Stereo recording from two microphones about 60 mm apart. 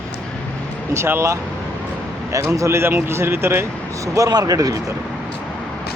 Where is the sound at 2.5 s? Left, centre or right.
Right.